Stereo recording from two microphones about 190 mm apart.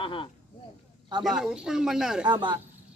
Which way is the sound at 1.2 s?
Centre (ahead or behind).